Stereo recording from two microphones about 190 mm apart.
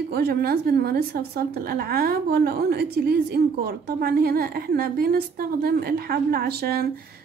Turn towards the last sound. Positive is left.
turn(degrees=-55)  # may be behind; listen again after turning